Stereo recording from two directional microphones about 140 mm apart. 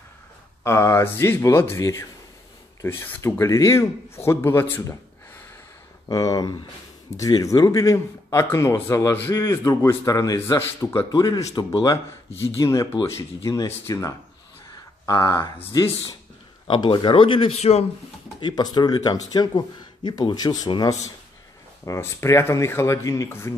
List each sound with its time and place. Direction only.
0.7 s a man's voice: 20° left (ahead or behind)
6.0 s a man's voice: 25° left (ahead or behind); by 17.8 s 50° left (ahead or behind)
18.4 s a man's voice: 30° left (ahead or behind)